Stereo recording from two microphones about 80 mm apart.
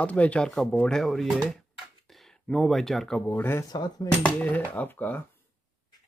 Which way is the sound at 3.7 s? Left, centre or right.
Left.